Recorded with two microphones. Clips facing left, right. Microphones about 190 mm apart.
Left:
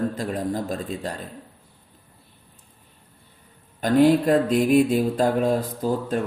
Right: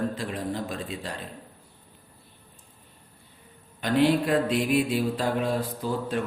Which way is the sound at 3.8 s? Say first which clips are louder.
Left 5 dB; 45° left (ahead or behind).